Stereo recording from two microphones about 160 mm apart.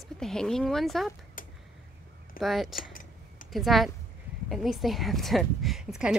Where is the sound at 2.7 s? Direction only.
60° left (ahead or behind).